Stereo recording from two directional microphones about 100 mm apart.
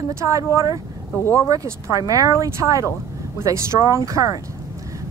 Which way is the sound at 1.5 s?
35° right (ahead or behind).